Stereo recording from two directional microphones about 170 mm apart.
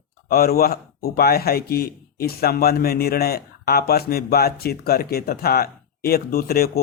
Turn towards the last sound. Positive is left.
turn(degrees=65)  # may be behind; listen again after turning